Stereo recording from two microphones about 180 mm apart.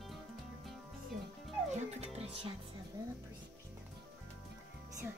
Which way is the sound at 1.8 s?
35° right (ahead or behind).